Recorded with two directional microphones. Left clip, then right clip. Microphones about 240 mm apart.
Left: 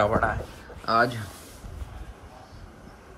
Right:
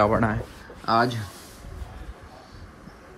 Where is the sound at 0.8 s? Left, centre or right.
Centre.